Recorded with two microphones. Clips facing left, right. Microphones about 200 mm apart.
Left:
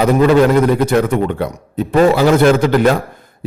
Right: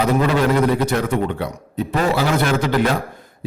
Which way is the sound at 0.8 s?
50° left (ahead or behind).